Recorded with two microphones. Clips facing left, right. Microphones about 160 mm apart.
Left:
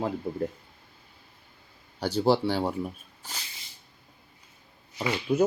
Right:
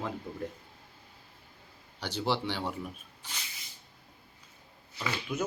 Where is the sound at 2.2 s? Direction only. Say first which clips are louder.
Left 8 dB; 40° left (ahead or behind).